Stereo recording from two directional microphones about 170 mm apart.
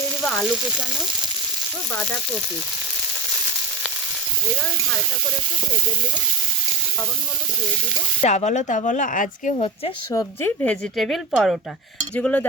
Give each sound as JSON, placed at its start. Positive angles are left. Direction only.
{"t": 0.2, "sound": "speech", "side_deg": 5}
{"t": 8.2, "sound": "a woman's voice", "side_deg": 45}
{"t": 10.1, "sound": "speech", "side_deg": 15}
{"t": 10.9, "sound": "a woman's voice", "side_deg": 0}
{"t": 12.1, "sound": "speech", "side_deg": 10}